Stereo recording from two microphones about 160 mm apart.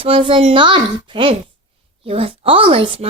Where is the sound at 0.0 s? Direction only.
35° right (ahead or behind).